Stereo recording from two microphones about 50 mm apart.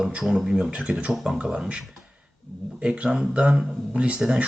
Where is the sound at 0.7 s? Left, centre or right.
Right.